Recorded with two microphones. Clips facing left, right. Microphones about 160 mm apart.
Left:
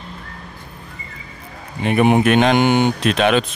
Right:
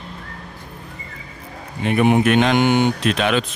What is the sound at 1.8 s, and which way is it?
Mantra, 60° left (ahead or behind).